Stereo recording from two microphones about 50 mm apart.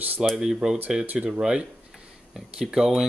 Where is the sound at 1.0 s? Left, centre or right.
Right.